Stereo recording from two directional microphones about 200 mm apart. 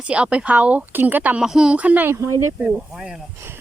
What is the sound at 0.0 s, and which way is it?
Speech, 5° right (ahead or behind).